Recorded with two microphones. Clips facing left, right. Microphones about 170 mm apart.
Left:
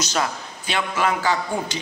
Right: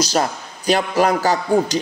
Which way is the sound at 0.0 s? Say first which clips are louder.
Right 5 dB; 40° right (ahead or behind).